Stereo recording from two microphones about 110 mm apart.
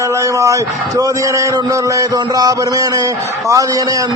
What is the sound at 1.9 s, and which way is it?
Speech, 35° right (ahead or behind).